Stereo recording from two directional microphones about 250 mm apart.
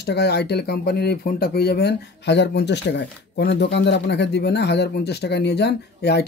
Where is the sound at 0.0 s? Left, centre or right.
Left.